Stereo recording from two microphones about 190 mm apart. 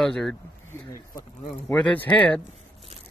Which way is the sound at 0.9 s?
15° left (ahead or behind).